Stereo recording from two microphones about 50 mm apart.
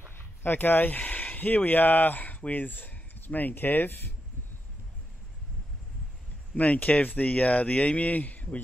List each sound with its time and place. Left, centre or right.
0.1 s a sound: left
1.0 s speech: left
6.5 s speech: left